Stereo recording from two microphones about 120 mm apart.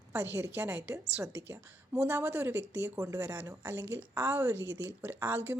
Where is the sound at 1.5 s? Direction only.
15° right (ahead or behind).